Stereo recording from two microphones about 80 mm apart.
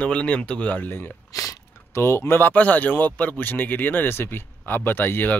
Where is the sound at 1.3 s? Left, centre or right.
Left.